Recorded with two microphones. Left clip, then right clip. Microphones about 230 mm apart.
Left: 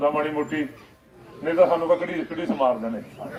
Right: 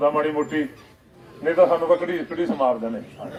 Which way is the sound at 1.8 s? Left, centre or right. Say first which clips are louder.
Right 2 dB; right.